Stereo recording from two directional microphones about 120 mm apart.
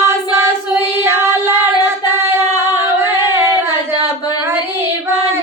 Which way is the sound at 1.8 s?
20° right (ahead or behind).